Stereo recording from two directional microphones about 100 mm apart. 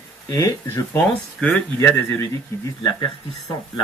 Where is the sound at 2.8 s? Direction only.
45° left (ahead or behind).